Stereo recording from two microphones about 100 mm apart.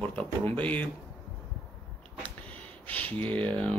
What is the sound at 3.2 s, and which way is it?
Speech, 10° left (ahead or behind).